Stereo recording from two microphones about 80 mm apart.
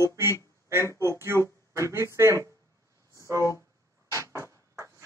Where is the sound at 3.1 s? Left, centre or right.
Right.